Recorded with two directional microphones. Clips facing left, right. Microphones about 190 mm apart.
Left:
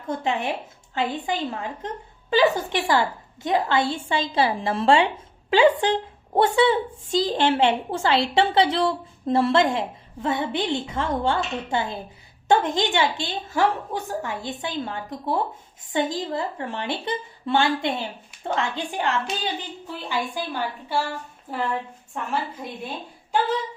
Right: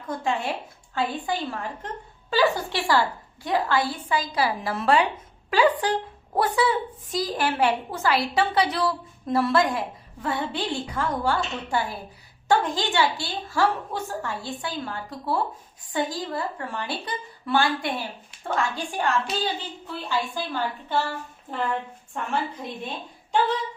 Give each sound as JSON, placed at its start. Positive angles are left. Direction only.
{"t": 0.1, "sound": "a woman's voice", "side_deg": 20}
{"t": 22.6, "sound": "a woman's voice", "side_deg": 5}